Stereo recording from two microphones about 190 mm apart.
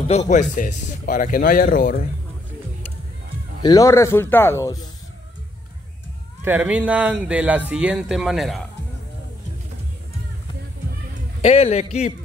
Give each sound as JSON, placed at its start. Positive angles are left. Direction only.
{"t": 0.1, "sound": "speech", "side_deg": 35}
{"t": 3.6, "sound": "speech", "side_deg": 15}
{"t": 6.4, "sound": "speech", "side_deg": -10}
{"t": 11.4, "sound": "a man's voice", "side_deg": 35}